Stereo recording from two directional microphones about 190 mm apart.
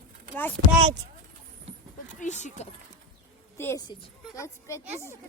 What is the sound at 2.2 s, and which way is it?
Speech, 40° left (ahead or behind).